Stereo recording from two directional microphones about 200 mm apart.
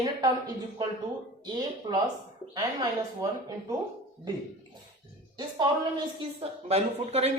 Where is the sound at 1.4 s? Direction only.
20° right (ahead or behind).